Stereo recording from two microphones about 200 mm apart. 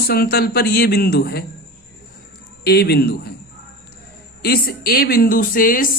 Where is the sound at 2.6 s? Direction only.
55° left (ahead or behind).